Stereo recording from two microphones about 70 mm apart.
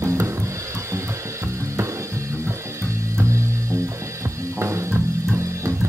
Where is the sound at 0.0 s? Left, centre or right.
Right.